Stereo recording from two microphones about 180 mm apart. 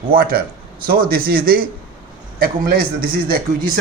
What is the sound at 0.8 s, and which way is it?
Speech, 55° right (ahead or behind).